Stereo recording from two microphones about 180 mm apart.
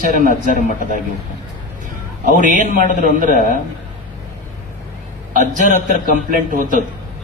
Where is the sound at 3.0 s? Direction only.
45° right (ahead or behind).